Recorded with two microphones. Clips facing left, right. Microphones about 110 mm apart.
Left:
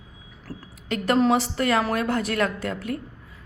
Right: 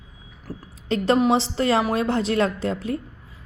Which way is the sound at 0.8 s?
25° right (ahead or behind).